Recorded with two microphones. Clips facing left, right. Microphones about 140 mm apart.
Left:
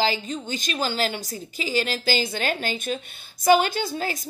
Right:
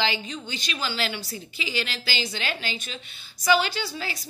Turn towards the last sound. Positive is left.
turn(degrees=45)  # may be behind; listen again after turning